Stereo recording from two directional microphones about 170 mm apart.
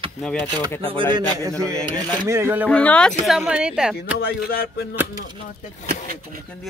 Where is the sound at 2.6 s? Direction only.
5° left (ahead or behind).